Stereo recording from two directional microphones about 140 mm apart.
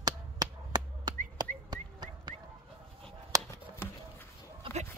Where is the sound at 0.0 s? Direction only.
30° right (ahead or behind).